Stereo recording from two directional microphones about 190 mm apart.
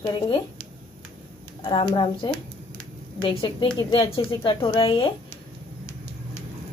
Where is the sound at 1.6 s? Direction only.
25° left (ahead or behind).